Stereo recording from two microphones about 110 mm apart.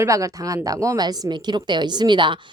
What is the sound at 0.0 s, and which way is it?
A woman's voice, 30° right (ahead or behind).